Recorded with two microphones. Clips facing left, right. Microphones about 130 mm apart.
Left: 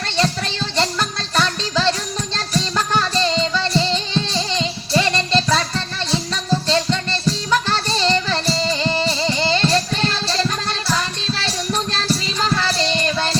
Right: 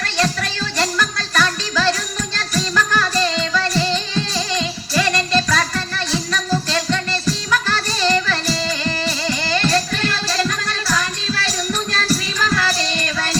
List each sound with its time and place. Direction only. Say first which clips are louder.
0.0 s music: even; 25° left (ahead or behind)